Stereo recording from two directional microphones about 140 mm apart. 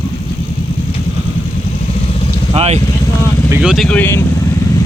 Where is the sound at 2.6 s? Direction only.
50° right (ahead or behind).